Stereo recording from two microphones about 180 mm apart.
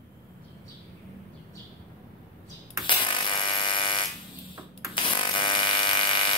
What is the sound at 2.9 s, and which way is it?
Electric shaver, 25° left (ahead or behind).